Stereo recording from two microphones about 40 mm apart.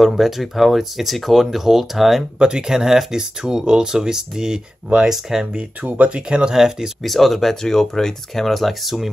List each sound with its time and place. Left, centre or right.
0.0 s speech: centre
2.3 s speech: right
5.1 s speech: centre
6.0 s speech: right
6.5 s speech: centre
7.0 s speech: centre